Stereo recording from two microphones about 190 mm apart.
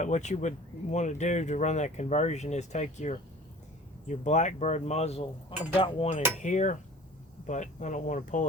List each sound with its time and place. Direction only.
0.0 s speech: 40° left (ahead or behind)
6.4 s speech: 40° left (ahead or behind)